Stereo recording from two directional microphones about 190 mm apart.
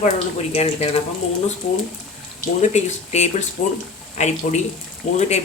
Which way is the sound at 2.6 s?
35° left (ahead or behind).